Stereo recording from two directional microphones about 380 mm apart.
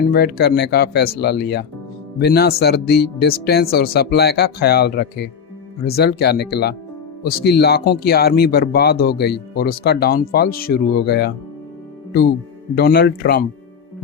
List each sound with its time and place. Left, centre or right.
0.1 s speech: left
12.7 s speech: left